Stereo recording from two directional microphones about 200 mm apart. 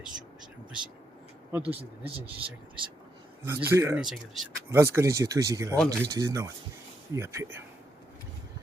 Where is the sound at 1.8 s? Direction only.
30° right (ahead or behind).